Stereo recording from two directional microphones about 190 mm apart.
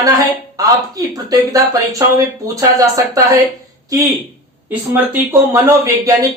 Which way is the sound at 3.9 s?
15° right (ahead or behind).